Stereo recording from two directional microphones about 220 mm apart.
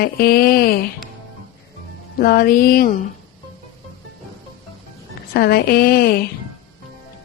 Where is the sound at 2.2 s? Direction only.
40° left (ahead or behind).